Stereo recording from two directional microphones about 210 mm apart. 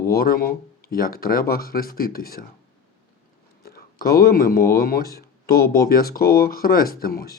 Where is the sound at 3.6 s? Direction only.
45° left (ahead or behind).